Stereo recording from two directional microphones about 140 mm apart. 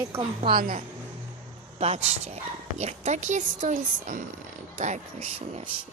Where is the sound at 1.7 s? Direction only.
50° right (ahead or behind).